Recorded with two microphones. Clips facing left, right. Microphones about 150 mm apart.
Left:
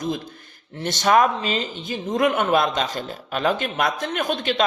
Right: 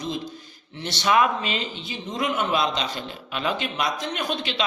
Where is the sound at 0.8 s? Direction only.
45° left (ahead or behind).